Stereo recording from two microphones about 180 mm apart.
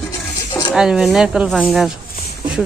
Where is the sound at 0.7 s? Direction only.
5° right (ahead or behind).